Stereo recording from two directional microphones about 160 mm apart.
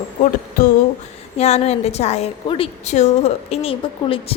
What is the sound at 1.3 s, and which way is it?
A woman's voice, 45° left (ahead or behind).